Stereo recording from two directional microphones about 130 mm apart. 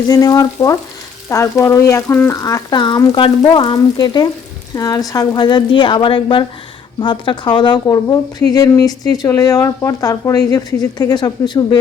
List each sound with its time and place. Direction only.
0.1 s speech: 30° left (ahead or behind)